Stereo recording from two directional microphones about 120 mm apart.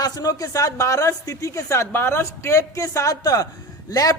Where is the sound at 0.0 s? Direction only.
30° left (ahead or behind).